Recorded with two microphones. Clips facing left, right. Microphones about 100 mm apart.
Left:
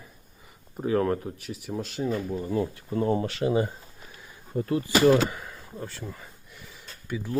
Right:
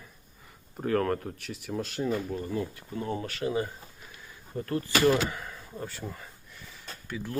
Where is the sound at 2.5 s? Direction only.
30° left (ahead or behind).